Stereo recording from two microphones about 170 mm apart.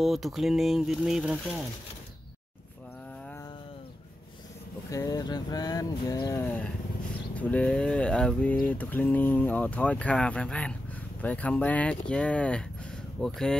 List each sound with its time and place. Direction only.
0.0 s speech: centre (ahead or behind)
4.9 s speech: 20° left (ahead or behind)
7.3 s a sound: 10° left (ahead or behind)
13.2 s speech: 5° left (ahead or behind)